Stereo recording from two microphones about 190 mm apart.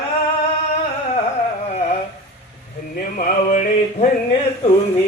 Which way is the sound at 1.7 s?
35° left (ahead or behind).